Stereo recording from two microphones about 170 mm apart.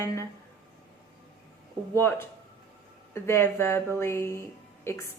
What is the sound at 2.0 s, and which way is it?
A woman's voice, 15° left (ahead or behind).